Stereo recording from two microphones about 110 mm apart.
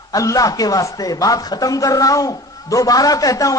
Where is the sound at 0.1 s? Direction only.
30° left (ahead or behind).